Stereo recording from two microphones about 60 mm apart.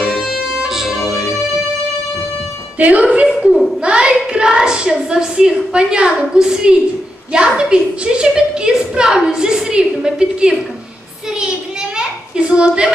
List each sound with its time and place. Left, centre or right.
0.0 s music: centre
2.8 s speech: right
3.3 s laughter: centre
3.8 s hands: centre
4.3 s a woman's voice: centre
12.0 s a sound: centre